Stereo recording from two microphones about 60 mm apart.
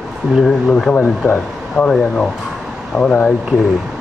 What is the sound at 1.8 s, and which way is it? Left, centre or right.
Speech, centre.